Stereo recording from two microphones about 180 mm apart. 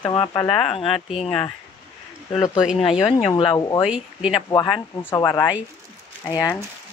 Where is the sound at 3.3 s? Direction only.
30° left (ahead or behind).